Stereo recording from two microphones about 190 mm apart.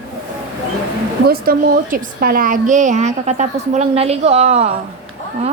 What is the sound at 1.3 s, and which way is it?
A woman's voice, 50° right (ahead or behind).